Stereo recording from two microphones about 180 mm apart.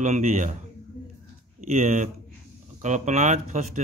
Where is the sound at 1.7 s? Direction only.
40° right (ahead or behind).